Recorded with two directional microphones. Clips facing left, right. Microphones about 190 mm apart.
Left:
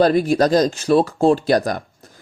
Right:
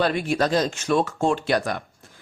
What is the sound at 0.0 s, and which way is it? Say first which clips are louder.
Speech: left 7 dB; 40° left (ahead or behind).